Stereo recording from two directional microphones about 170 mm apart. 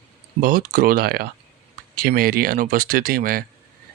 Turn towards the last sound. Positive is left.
turn(degrees=-55)  # may be behind; listen again after turning